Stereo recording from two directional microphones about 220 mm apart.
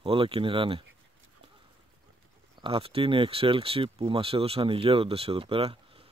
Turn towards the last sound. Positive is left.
turn(degrees=-25)  # may be behind; listen again after turning